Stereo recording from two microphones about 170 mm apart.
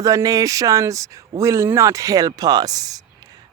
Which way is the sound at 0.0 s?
20° right (ahead or behind).